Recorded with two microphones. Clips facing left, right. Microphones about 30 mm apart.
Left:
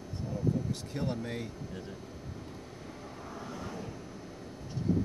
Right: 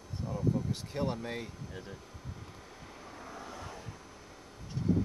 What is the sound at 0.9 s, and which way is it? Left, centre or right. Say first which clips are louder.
Speech: right 1 dB; centre.